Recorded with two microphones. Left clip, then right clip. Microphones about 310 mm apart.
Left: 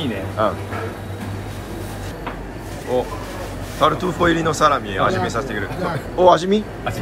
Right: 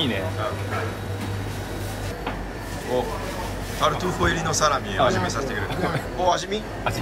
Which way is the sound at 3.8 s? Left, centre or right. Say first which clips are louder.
Left 6 dB; centre.